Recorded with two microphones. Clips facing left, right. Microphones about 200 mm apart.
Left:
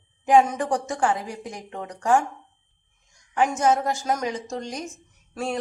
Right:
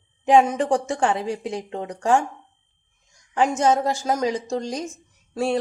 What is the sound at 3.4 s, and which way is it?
A woman's voice, 30° right (ahead or behind).